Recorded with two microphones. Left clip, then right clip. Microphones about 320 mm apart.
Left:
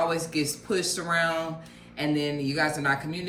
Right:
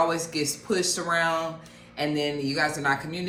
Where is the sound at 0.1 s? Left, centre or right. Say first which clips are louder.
Even; centre.